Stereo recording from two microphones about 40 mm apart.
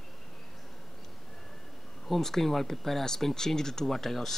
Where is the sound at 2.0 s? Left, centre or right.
Centre.